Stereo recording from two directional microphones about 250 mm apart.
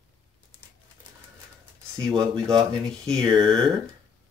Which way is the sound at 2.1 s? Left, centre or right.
Centre.